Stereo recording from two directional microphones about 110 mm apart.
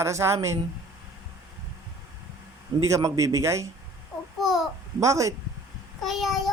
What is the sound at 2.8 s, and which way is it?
Speech, 30° right (ahead or behind).